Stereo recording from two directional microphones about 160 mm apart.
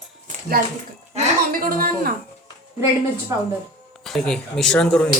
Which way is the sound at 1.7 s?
65° right (ahead or behind).